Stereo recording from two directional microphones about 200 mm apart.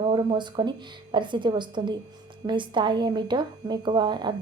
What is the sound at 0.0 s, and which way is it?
A woman's voice, 25° right (ahead or behind).